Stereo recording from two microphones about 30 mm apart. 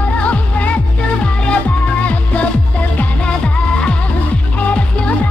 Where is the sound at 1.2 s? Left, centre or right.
Left.